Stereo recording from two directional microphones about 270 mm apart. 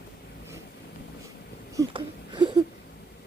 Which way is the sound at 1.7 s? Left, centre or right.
Centre.